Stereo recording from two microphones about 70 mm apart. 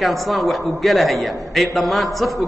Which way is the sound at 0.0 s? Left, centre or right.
Centre.